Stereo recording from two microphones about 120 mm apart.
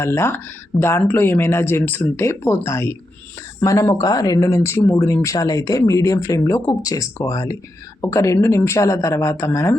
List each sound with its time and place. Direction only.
0.0 s speech: 20° left (ahead or behind)